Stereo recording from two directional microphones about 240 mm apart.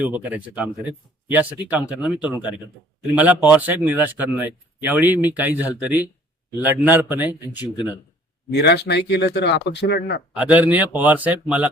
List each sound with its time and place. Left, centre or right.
0.0 s speech: centre
8.5 s speech: left
10.3 s speech: centre